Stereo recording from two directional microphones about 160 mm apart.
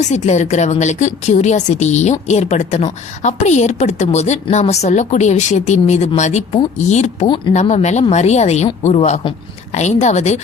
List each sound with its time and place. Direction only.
0.0 s speech: 45° left (ahead or behind)